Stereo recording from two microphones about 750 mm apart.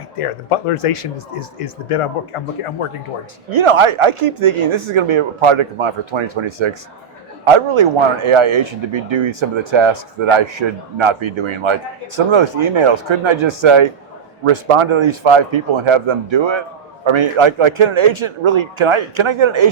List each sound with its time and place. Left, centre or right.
0.2 s speech: left
3.6 s speech: right